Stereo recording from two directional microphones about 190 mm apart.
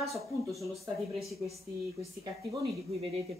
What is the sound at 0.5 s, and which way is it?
Speech, centre (ahead or behind).